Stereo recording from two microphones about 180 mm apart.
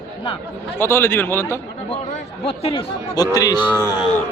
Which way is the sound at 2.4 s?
30° left (ahead or behind).